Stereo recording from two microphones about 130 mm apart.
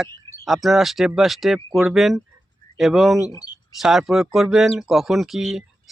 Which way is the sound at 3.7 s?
Centre (ahead or behind).